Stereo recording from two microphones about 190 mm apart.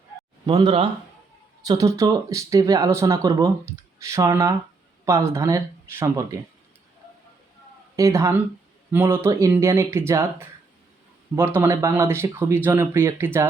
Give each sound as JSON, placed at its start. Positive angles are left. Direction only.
{"t": 0.4, "sound": "speech", "side_deg": -25}
{"t": 7.9, "sound": "speech", "side_deg": -15}